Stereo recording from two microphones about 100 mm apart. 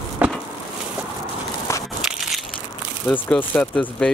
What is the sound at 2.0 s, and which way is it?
Crushing, 5° right (ahead or behind).